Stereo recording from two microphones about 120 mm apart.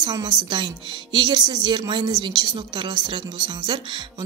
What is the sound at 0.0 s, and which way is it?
Speech, 35° right (ahead or behind).